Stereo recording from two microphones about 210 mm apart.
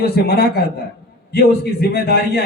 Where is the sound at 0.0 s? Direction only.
50° left (ahead or behind).